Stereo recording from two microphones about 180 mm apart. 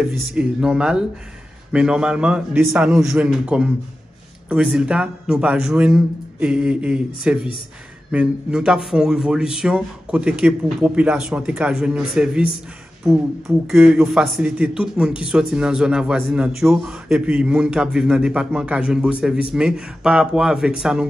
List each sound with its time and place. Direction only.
0.0 s a man's voice: 5° right (ahead or behind)
13.7 s a man's voice: 5° right (ahead or behind)